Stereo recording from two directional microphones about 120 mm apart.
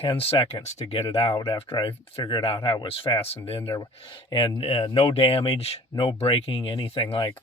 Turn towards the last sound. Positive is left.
turn(degrees=45)  # may be behind; listen again after turning